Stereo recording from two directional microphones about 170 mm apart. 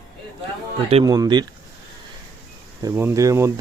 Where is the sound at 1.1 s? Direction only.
25° right (ahead or behind).